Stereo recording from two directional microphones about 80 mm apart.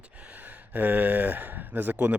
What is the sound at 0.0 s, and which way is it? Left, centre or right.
Speech, centre.